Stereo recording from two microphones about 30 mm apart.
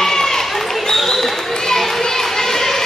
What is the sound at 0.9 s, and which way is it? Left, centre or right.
Basketball bounce, centre.